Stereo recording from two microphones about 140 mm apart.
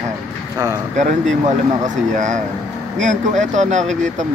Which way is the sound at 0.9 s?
60° right (ahead or behind).